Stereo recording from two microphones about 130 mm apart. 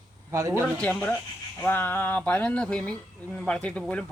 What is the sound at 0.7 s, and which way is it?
Speech, 10° left (ahead or behind).